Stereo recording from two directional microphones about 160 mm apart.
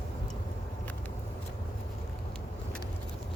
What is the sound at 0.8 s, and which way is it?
Vehicle, 10° left (ahead or behind).